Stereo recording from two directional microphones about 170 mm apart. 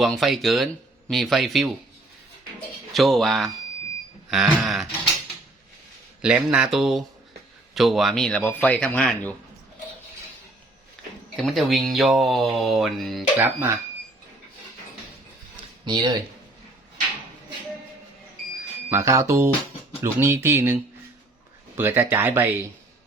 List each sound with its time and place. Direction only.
0.0 s speech: centre (ahead or behind)
2.9 s speech: centre (ahead or behind)
6.2 s speech: 5° right (ahead or behind)
11.3 s speech: centre (ahead or behind)
13.4 s speech: 15° right (ahead or behind)
15.9 s speech: 25° right (ahead or behind)
18.9 s speech: 15° right (ahead or behind)
21.8 s speech: 15° right (ahead or behind)